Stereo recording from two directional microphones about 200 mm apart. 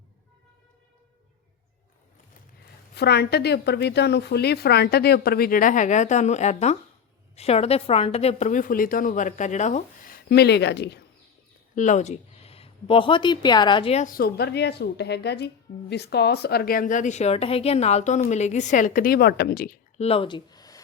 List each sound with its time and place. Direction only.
2.9 s a woman's voice: 55° left (ahead or behind)
11.7 s a woman's voice: 40° left (ahead or behind)
20.0 s speech: 30° left (ahead or behind)